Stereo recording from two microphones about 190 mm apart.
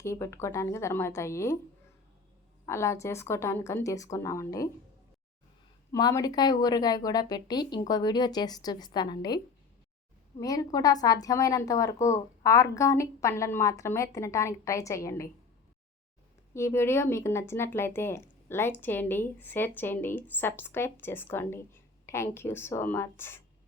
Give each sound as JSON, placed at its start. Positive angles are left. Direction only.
{"t": 0.0, "sound": "a woman's voice", "side_deg": 15}
{"t": 2.6, "sound": "a woman's voice", "side_deg": 15}
{"t": 5.9, "sound": "speech", "side_deg": 15}
{"t": 10.4, "sound": "a woman's voice", "side_deg": 20}
{"t": 16.6, "sound": "a woman's voice", "side_deg": 15}